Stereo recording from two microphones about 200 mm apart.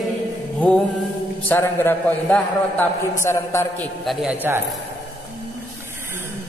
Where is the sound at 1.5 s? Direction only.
10° left (ahead or behind).